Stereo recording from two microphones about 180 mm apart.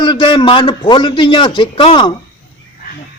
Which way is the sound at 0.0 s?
25° left (ahead or behind).